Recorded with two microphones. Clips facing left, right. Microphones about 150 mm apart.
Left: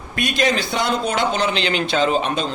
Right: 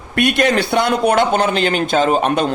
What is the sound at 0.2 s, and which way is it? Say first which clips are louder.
Speech: right 5 dB; 60° right (ahead or behind).